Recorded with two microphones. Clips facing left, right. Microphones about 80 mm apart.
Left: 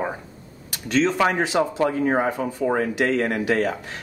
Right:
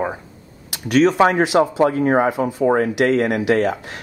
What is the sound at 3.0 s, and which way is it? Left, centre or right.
Speech, centre.